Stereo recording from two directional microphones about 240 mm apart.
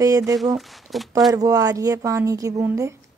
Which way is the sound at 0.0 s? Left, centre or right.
Centre.